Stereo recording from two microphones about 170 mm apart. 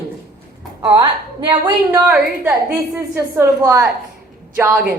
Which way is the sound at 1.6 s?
10° right (ahead or behind).